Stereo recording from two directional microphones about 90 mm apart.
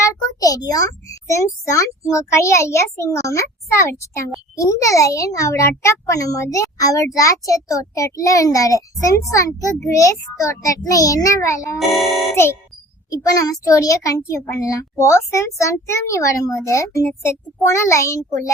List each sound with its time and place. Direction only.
0.0 s a child's voice: 40° left (ahead or behind)
11.8 s speech: centre (ahead or behind)
13.1 s a child's voice: 40° left (ahead or behind)